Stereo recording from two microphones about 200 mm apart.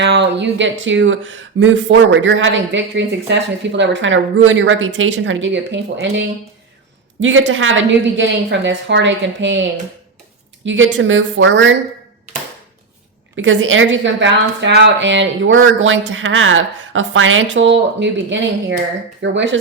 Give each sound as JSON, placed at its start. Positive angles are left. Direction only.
{"t": 0.0, "sound": "a woman's voice", "side_deg": -60}
{"t": 10.7, "sound": "speech", "side_deg": -65}
{"t": 13.3, "sound": "speech", "side_deg": -70}